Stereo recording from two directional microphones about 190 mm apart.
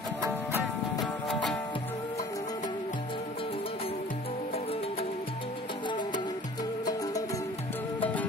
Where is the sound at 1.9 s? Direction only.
15° left (ahead or behind).